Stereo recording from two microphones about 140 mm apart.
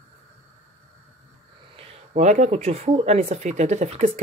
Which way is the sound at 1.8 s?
50° right (ahead or behind).